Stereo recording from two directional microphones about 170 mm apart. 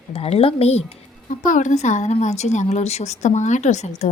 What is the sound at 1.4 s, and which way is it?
A woman's voice, 50° left (ahead or behind).